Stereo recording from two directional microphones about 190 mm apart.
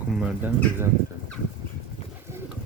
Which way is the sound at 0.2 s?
5° right (ahead or behind).